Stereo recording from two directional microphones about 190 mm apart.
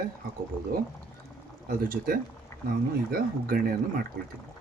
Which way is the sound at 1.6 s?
50° right (ahead or behind).